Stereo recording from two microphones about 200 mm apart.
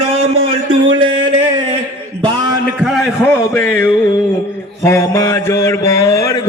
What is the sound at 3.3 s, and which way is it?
Music, 10° left (ahead or behind).